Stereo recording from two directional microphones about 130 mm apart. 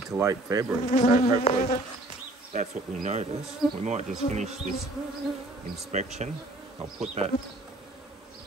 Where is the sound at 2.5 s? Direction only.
70° right (ahead or behind).